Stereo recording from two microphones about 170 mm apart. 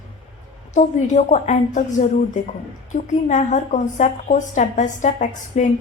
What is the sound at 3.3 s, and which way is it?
A woman's voice, 45° left (ahead or behind).